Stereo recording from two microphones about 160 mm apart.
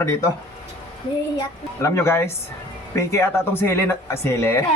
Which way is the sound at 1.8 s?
15° left (ahead or behind).